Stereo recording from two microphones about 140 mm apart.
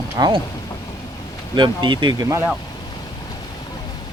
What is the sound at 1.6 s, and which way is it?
Speech, 35° right (ahead or behind).